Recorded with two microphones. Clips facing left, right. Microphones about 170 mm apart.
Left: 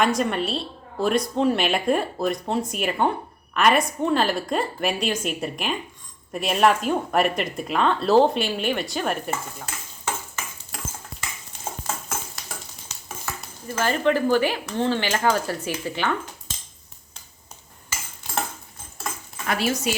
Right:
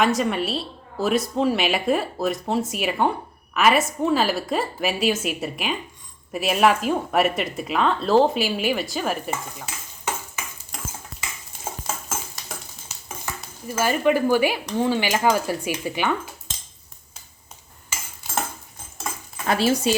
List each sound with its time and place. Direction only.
0.0 s a woman's voice: centre (ahead or behind)
10.7 s cutlery: centre (ahead or behind)
13.7 s speech: 10° right (ahead or behind)
17.8 s cutlery: 15° right (ahead or behind)
19.5 s speech: 30° right (ahead or behind)